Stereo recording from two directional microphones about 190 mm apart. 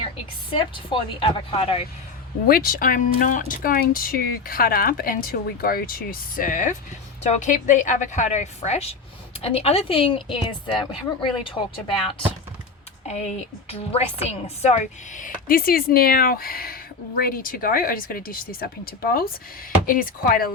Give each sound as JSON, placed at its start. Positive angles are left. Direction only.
{"t": 0.5, "sound": "a woman's voice", "side_deg": 30}
{"t": 2.5, "sound": "a woman's voice", "side_deg": 50}
{"t": 13.1, "sound": "speech", "side_deg": 35}